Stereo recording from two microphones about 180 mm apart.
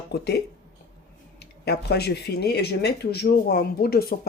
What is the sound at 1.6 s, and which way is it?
Speech, 65° left (ahead or behind).